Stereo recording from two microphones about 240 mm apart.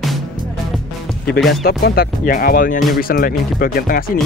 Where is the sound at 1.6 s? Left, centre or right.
Left.